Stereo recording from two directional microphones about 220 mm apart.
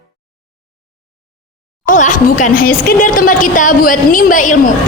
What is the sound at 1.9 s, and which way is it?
A woman's voice, 35° left (ahead or behind).